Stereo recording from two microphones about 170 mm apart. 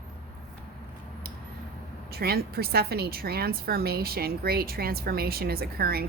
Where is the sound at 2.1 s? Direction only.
65° right (ahead or behind).